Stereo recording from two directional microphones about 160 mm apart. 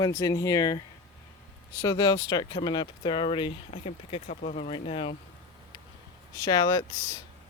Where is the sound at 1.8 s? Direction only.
25° left (ahead or behind).